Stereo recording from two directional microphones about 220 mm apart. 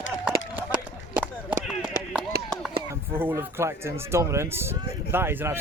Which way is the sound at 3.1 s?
10° right (ahead or behind).